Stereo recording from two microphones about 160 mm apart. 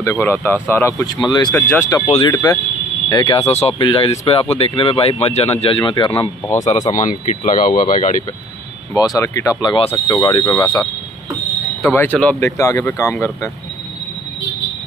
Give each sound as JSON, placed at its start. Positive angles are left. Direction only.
{"t": 0.0, "sound": "speech", "side_deg": 15}
{"t": 1.7, "sound": "speech", "side_deg": 15}
{"t": 7.0, "sound": "speech", "side_deg": 55}
{"t": 8.9, "sound": "speech", "side_deg": 20}
{"t": 10.4, "sound": "speech", "side_deg": 10}